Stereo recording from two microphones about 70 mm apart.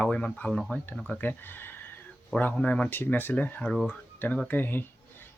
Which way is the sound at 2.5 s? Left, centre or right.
Centre.